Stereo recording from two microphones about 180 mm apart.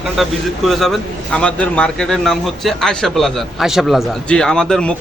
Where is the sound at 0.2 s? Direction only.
Centre (ahead or behind).